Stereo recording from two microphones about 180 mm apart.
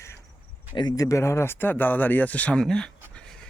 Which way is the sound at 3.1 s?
5° left (ahead or behind).